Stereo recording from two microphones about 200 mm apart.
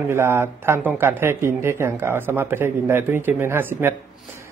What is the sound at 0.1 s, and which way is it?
Speech, 10° right (ahead or behind).